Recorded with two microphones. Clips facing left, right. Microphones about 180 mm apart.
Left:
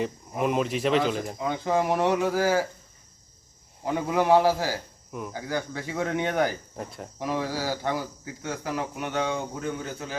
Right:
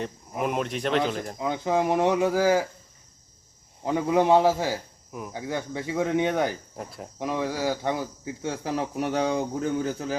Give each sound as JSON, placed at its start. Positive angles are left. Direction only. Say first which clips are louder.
{"t": 0.0, "sound": "speech", "louder": "left 2 dB", "side_deg": 0}
{"t": 1.4, "sound": "speech", "louder": "right 2 dB", "side_deg": -15}
{"t": 4.1, "sound": "speech", "louder": "right 1 dB", "side_deg": -20}
{"t": 6.7, "sound": "speech", "louder": "left 1 dB", "side_deg": 0}
{"t": 7.2, "sound": "speech", "louder": "right 1 dB", "side_deg": -20}